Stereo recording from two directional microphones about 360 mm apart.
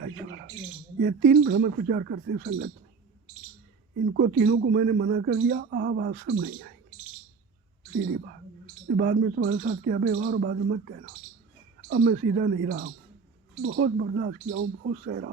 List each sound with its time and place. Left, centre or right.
1.0 s a man's voice: right
4.1 s a man's voice: right
9.0 s a man's voice: right
11.9 s a man's voice: right